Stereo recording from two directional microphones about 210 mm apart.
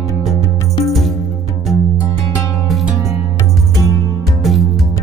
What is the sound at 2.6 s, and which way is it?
Music, centre (ahead or behind).